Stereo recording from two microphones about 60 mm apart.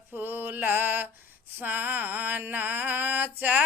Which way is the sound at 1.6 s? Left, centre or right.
Right.